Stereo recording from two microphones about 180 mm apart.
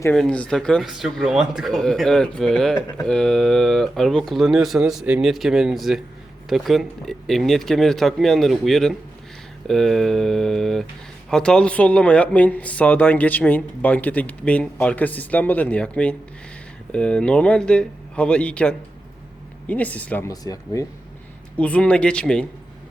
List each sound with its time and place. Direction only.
0.1 s speech: 5° left (ahead or behind)
20.3 s speech: 20° left (ahead or behind)
21.6 s speech: 5° left (ahead or behind)